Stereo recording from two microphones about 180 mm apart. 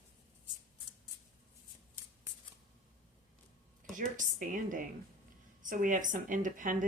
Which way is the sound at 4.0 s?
45° right (ahead or behind).